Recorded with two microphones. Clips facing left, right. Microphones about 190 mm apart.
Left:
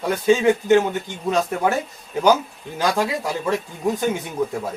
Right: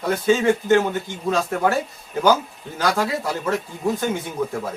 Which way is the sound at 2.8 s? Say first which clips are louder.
Left 1 dB; 15° left (ahead or behind).